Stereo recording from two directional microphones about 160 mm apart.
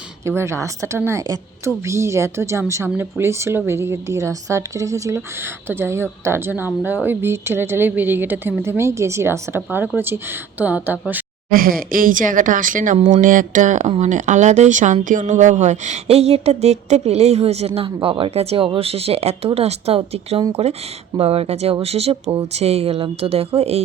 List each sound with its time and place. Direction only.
0.3 s a woman's voice: 15° right (ahead or behind)
11.5 s speech: 65° right (ahead or behind); by 23.8 s 40° right (ahead or behind)